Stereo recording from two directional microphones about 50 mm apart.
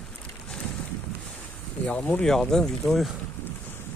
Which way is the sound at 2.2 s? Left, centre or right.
Centre.